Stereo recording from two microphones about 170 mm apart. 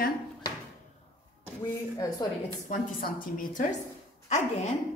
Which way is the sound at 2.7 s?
55° left (ahead or behind).